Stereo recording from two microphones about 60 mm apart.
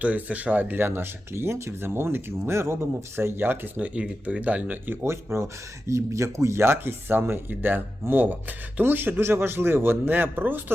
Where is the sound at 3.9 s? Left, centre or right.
Right.